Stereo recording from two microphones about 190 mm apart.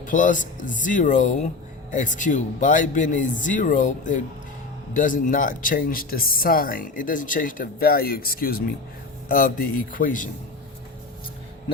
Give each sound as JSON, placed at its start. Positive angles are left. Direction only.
{"t": 0.0, "sound": "a man's voice", "side_deg": 45}